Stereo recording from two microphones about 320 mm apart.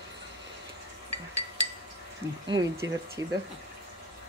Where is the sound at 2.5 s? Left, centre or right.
Centre.